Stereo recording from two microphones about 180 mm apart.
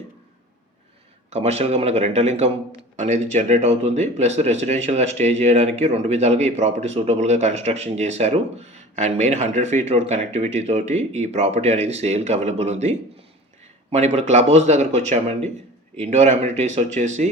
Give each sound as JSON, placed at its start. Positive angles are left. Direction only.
{"t": 1.3, "sound": "speech", "side_deg": -35}